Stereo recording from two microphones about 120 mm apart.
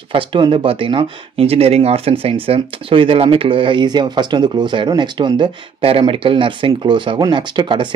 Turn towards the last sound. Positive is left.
turn(degrees=-40)  # may be behind; listen again after turning